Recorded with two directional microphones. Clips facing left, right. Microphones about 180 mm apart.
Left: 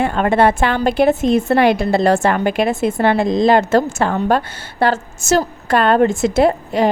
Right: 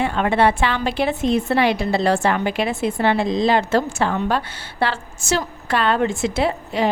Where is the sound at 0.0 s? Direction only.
45° left (ahead or behind).